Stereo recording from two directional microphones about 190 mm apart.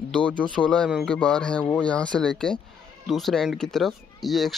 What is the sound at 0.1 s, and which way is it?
Speech, 5° left (ahead or behind).